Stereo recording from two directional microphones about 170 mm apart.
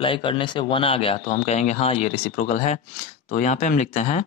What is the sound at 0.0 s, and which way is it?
Speech, 30° left (ahead or behind).